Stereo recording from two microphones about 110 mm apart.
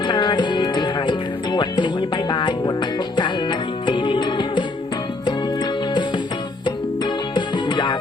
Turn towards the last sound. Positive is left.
turn(degrees=45)  # may be behind; listen again after turning